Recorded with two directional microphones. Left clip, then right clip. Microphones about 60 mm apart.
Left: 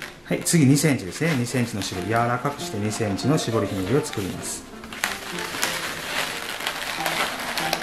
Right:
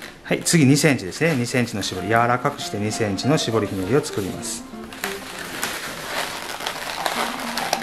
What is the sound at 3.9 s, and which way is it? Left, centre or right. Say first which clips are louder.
Speech: right 3 dB; right.